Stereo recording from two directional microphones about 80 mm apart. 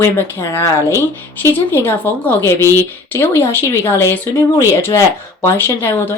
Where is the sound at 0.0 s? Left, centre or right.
Left.